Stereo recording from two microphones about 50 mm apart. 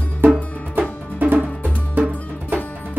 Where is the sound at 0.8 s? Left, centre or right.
Right.